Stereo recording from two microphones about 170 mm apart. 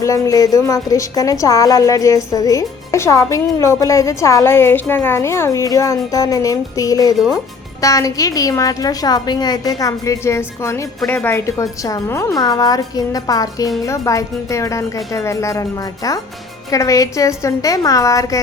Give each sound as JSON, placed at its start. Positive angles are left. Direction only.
{"t": 0.0, "sound": "a woman's voice", "side_deg": 20}